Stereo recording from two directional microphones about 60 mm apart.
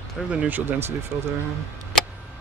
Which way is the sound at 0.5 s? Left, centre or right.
Right.